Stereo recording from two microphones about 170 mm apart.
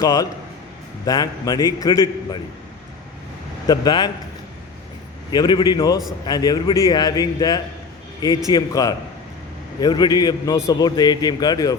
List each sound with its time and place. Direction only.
0.0 s a man's voice: 20° left (ahead or behind)
3.7 s a man's voice: 25° left (ahead or behind)
5.3 s a man's voice: 25° left (ahead or behind)